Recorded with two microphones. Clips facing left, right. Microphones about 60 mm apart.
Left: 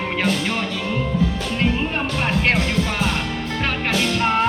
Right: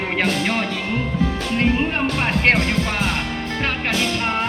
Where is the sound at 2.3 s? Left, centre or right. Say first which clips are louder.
Right 2 dB; right.